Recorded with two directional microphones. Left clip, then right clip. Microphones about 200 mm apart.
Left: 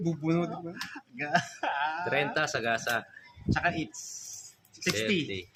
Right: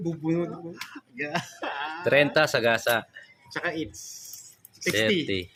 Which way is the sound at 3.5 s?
20° left (ahead or behind).